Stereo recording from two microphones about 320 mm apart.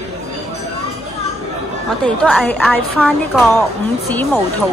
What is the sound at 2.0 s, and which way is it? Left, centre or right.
A woman's voice, centre.